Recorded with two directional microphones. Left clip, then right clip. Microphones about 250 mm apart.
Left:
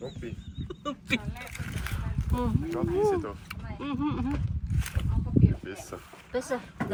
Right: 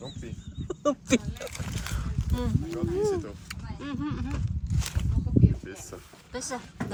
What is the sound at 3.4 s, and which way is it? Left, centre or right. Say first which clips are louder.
Vehicle: left 2 dB; centre.